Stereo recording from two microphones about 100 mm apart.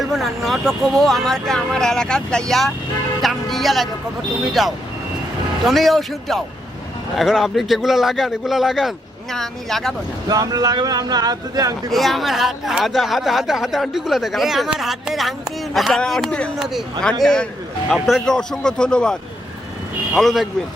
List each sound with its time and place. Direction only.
0.0 s speech: centre (ahead or behind)
10.2 s speech: 40° right (ahead or behind)
11.9 s speech: centre (ahead or behind)
16.6 s speech: 5° right (ahead or behind)
17.0 s speech: 5° left (ahead or behind)
17.9 s speech: 5° right (ahead or behind)
18.3 s speech: 5° left (ahead or behind)